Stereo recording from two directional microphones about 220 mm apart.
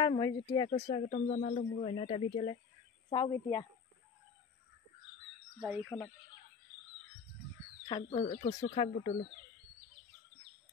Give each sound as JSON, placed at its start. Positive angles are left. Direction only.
{"t": 0.0, "sound": "speech", "side_deg": 20}
{"t": 5.6, "sound": "speech", "side_deg": 0}
{"t": 7.9, "sound": "speech", "side_deg": 20}